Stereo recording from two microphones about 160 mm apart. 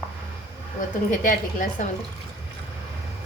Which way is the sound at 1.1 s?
55° left (ahead or behind).